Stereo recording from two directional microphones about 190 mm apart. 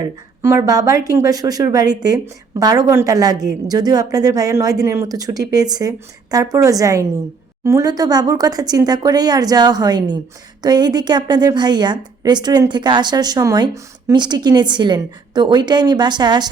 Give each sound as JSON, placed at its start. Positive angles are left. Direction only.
{"t": 0.4, "sound": "a woman's voice", "side_deg": -15}